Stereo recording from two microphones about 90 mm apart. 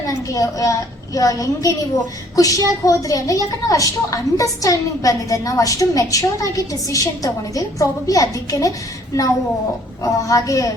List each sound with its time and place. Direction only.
0.1 s a woman's voice: 40° left (ahead or behind)
10.0 s a woman's voice: 40° left (ahead or behind)